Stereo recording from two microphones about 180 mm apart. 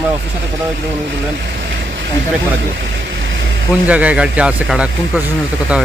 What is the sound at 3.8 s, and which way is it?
Speech, 10° right (ahead or behind).